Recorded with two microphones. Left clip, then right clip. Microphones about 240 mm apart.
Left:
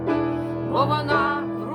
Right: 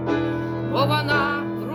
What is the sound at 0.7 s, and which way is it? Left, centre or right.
Music, centre.